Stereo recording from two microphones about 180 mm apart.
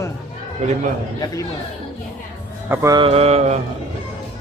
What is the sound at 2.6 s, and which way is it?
Mantra, 15° right (ahead or behind).